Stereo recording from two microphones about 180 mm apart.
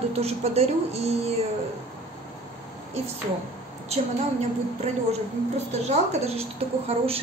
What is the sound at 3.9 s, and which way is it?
A woman's voice, 35° right (ahead or behind).